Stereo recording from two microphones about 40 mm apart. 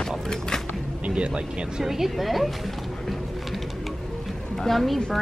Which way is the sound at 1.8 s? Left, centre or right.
Centre.